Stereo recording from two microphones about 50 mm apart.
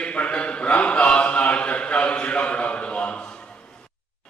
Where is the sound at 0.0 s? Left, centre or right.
Left.